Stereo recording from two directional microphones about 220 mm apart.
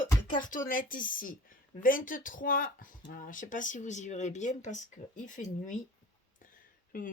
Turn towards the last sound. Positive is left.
turn(degrees=40)  # may be behind; listen again after turning